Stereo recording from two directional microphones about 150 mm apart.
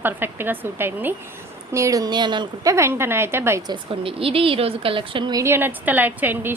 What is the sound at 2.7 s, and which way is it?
Speech, 15° right (ahead or behind).